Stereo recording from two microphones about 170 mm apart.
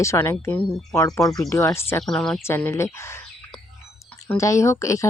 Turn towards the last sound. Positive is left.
turn(degrees=20)  # may be behind; listen again after turning